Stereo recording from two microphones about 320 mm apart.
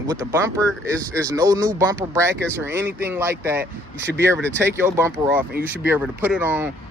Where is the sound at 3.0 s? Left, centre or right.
Centre.